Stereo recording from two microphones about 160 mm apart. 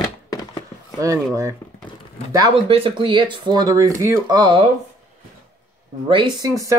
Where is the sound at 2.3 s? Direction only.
30° right (ahead or behind).